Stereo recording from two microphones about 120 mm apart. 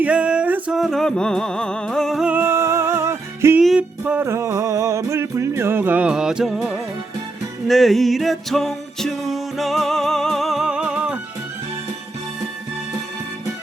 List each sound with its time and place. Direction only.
0.0 s music: 10° right (ahead or behind)
0.8 s music: centre (ahead or behind)
2.2 s music: 15° right (ahead or behind)
3.6 s music: centre (ahead or behind)
4.0 s music: 10° right (ahead or behind)
4.3 s music: 25° right (ahead or behind); by 11.2 s 10° right (ahead or behind)